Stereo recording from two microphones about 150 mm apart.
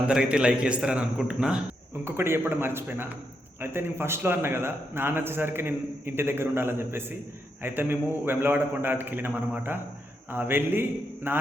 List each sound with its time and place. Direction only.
0.1 s a man's voice: 5° right (ahead or behind)
2.0 s a man's voice: 15° right (ahead or behind)